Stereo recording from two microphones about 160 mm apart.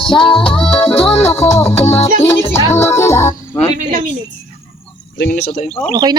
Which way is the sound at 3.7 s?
55° right (ahead or behind).